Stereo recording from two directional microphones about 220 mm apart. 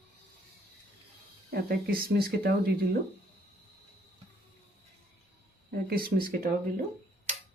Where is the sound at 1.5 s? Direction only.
45° right (ahead or behind).